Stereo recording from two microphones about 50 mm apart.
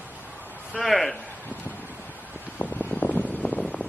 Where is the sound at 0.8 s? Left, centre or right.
Centre.